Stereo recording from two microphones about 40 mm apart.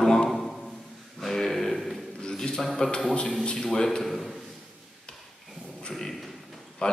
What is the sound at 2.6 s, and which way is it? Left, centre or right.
Speech, centre.